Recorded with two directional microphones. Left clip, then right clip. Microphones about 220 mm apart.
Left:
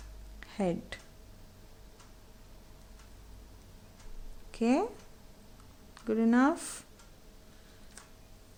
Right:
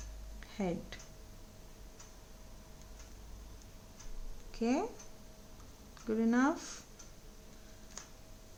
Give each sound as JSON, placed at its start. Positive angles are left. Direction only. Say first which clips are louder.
{"t": 0.3, "sound": "a sound", "louder": "left 5 dB", "side_deg": 40}
{"t": 4.5, "sound": "speech", "louder": "left 5 dB", "side_deg": 40}
{"t": 5.9, "sound": "speech", "louder": "left 5 dB", "side_deg": 40}